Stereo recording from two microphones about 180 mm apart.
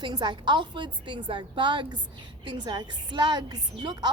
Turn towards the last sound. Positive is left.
turn(degrees=-25)  # may be behind; listen again after turning